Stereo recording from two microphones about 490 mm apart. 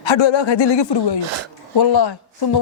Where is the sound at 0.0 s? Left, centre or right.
Left.